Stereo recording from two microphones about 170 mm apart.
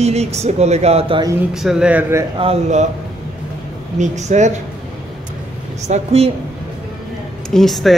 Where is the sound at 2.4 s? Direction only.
40° right (ahead or behind).